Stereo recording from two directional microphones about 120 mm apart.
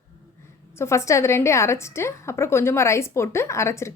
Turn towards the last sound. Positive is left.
turn(degrees=25)  # may be behind; listen again after turning